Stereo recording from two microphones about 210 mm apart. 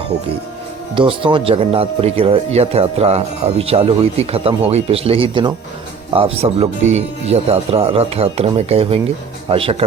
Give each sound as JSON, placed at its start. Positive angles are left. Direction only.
{"t": 0.9, "sound": "speech", "side_deg": -25}